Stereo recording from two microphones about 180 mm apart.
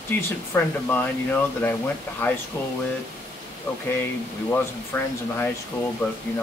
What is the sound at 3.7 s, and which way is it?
Speech, 10° left (ahead or behind).